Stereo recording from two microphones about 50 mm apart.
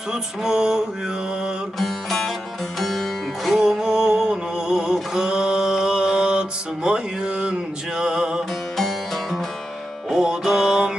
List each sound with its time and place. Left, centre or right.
0.1 s music: centre
1.8 s music: centre
3.6 s music: centre
4.9 s mantra: centre
6.8 s music: centre
8.7 s music: centre
10.2 s music: centre